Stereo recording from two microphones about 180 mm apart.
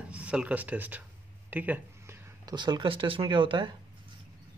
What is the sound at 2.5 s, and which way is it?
Speech, 25° right (ahead or behind).